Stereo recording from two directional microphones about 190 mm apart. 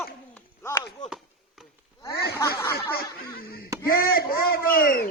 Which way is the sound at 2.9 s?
55° left (ahead or behind).